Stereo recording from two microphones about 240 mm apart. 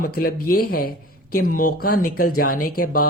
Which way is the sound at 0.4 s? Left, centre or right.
Left.